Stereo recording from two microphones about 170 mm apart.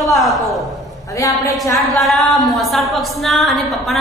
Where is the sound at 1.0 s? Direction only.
20° left (ahead or behind).